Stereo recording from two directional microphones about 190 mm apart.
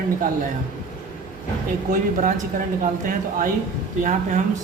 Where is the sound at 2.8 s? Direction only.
45° right (ahead or behind).